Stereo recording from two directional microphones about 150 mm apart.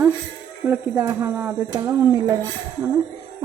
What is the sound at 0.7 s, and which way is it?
Speech, 15° right (ahead or behind).